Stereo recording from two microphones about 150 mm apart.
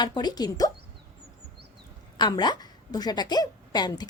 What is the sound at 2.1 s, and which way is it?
A woman's voice, 30° left (ahead or behind).